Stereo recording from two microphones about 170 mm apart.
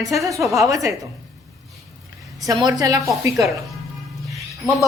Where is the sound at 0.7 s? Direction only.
20° right (ahead or behind).